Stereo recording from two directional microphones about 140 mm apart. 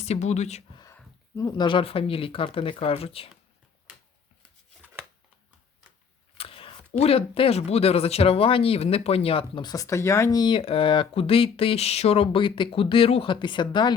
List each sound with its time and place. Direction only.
0.0 s speech: 55° left (ahead or behind)
1.4 s speech: 30° left (ahead or behind)
6.3 s speech: 40° left (ahead or behind)
10.6 s speech: 40° left (ahead or behind)